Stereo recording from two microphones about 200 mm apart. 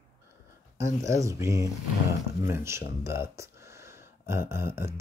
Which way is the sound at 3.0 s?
15° right (ahead or behind).